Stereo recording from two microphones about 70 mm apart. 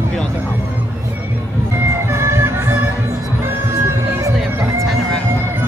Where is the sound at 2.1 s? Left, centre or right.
Right.